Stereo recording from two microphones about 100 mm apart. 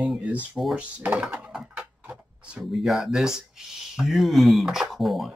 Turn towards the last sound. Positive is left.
turn(degrees=0)  # may be behind; listen again after turning